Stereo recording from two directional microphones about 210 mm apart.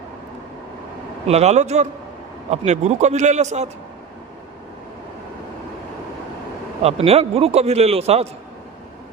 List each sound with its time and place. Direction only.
1.3 s a man's voice: 30° right (ahead or behind)
6.8 s a man's voice: 30° right (ahead or behind)